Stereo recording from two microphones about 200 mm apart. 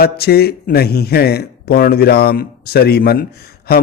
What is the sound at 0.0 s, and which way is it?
A man's voice, 50° left (ahead or behind).